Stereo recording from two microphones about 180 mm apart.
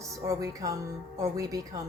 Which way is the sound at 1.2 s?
20° right (ahead or behind).